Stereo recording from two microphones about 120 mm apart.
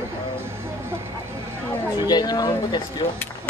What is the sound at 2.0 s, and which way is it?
Speech, 35° left (ahead or behind).